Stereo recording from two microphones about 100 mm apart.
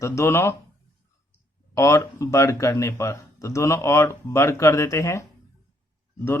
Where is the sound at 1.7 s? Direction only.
30° left (ahead or behind).